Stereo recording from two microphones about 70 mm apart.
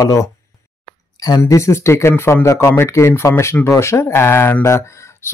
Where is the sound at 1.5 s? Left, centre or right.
Left.